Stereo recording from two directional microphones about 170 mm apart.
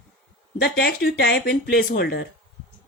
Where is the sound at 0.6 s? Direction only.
70° left (ahead or behind).